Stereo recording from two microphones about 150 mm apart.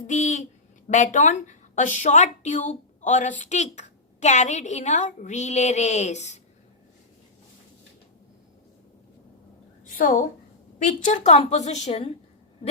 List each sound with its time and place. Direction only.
0.1 s a woman's voice: 50° left (ahead or behind)
9.8 s a sound: 60° left (ahead or behind)
10.8 s a woman's voice: 55° left (ahead or behind)